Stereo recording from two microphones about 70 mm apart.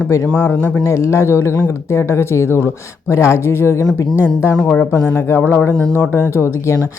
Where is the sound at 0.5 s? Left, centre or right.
Left.